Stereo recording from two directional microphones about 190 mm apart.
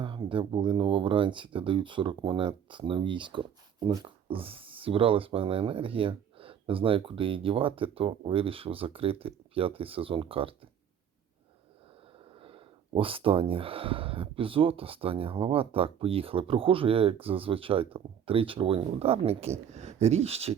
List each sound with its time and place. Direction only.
0.0 s speech: 25° right (ahead or behind)
12.4 s speech: 30° right (ahead or behind)